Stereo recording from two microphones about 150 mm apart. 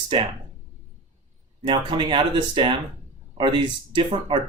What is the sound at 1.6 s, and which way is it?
Speech, 30° right (ahead or behind).